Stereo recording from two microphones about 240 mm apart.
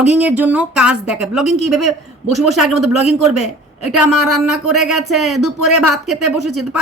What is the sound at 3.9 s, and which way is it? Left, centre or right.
Speech, centre.